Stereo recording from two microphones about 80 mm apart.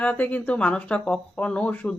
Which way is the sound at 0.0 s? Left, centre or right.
Centre.